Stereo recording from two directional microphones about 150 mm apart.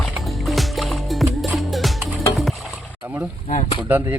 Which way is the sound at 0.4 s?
Centre (ahead or behind).